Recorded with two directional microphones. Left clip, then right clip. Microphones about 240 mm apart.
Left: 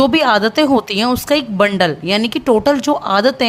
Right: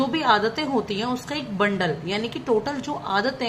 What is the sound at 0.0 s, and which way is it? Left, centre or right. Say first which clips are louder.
A woman's voice: left 8 dB; left.